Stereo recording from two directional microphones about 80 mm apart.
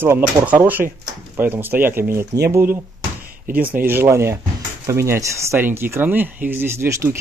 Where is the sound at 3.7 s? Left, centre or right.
Right.